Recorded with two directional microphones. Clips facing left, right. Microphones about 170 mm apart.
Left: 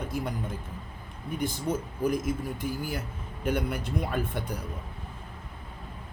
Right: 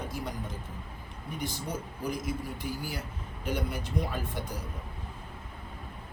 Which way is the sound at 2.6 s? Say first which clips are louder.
Left 4 dB; 50° left (ahead or behind).